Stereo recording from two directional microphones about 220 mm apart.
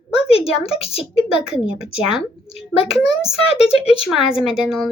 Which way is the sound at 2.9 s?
Centre (ahead or behind).